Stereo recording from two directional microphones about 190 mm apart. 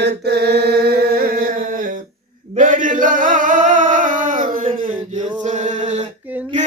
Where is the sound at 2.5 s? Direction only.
45° right (ahead or behind).